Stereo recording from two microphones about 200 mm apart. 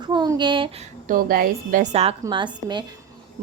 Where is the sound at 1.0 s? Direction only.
45° right (ahead or behind).